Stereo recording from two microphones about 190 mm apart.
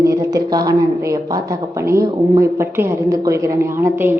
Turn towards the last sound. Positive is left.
turn(degrees=-10)  # may be behind; listen again after turning